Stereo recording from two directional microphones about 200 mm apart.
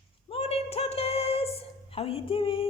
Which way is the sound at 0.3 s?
30° left (ahead or behind).